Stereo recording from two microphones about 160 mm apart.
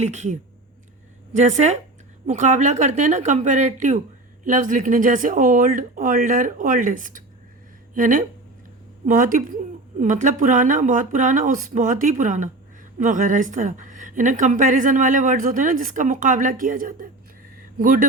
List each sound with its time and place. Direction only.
0.0 s a woman's voice: 45° right (ahead or behind); by 18.1 s 65° right (ahead or behind)